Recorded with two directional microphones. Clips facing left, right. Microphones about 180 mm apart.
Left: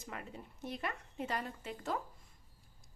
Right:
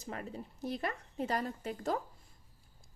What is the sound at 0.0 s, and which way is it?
Speech, 35° right (ahead or behind).